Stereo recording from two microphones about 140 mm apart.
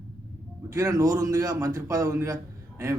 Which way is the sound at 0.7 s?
25° right (ahead or behind).